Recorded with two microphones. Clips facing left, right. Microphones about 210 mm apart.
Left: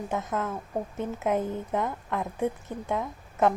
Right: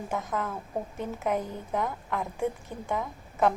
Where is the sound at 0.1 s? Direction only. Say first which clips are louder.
Left 1 dB; 5° left (ahead or behind).